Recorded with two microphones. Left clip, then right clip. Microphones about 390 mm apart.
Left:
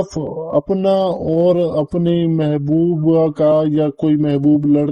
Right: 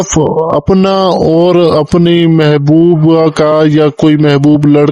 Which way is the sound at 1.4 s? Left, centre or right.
Right.